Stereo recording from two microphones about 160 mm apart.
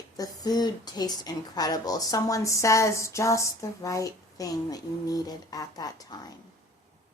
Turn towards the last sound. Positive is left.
turn(degrees=25)  # may be behind; listen again after turning